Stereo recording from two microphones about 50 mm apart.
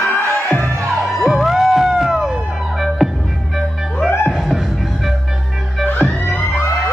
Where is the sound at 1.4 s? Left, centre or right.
Centre.